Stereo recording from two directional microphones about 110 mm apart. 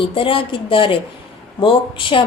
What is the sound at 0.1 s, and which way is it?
A woman's voice, 55° left (ahead or behind).